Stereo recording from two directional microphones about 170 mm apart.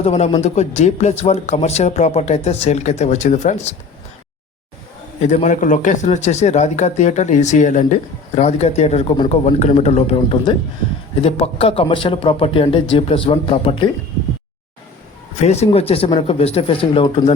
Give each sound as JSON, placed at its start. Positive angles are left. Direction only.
{"t": 0.0, "sound": "speech", "side_deg": 40}
{"t": 5.2, "sound": "speech", "side_deg": 40}
{"t": 15.4, "sound": "speech", "side_deg": 40}